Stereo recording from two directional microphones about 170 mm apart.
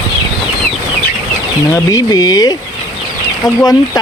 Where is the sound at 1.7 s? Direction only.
20° left (ahead or behind).